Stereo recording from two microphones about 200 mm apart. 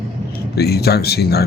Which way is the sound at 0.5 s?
50° left (ahead or behind).